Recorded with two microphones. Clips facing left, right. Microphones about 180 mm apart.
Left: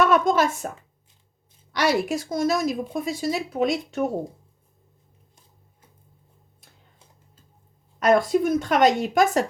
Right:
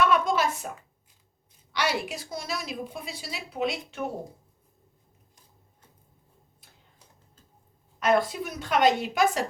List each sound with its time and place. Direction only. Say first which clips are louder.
0.0 s speech: left 4 dB; 45° left (ahead or behind)
1.8 s a woman's voice: left 7 dB; 45° left (ahead or behind)
7.9 s a woman's voice: left 5 dB; 45° left (ahead or behind)